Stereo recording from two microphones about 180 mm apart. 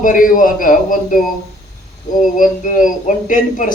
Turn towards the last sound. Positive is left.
turn(degrees=45)  # may be behind; listen again after turning